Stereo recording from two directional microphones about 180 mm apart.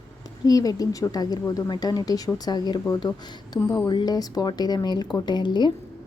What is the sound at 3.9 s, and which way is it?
A woman's voice, 20° left (ahead or behind).